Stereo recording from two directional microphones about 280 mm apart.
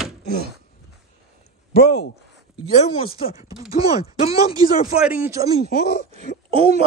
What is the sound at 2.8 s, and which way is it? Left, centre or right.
Speech, left.